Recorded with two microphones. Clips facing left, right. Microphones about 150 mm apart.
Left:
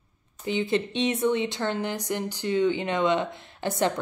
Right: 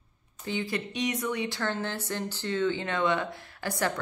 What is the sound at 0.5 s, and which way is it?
Speech, 25° left (ahead or behind).